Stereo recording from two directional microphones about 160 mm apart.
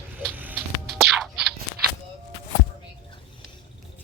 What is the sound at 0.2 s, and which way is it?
Music, 10° right (ahead or behind).